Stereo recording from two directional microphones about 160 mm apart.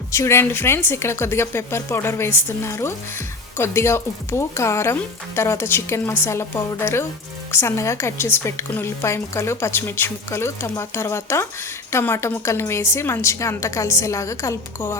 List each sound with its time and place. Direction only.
0.1 s speech: 15° left (ahead or behind)